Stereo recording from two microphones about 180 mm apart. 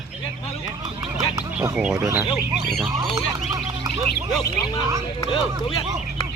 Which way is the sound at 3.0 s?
20° right (ahead or behind).